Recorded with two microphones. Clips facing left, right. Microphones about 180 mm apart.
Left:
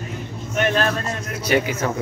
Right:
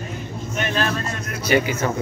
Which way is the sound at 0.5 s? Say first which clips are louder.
Left 4 dB; 50° left (ahead or behind).